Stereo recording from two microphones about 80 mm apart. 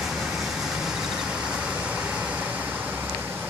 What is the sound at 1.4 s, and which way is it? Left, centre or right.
Vehicle, centre.